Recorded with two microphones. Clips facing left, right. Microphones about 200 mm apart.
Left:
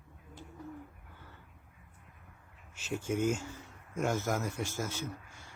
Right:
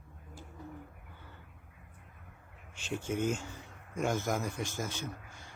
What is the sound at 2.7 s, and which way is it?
Speech, 5° left (ahead or behind).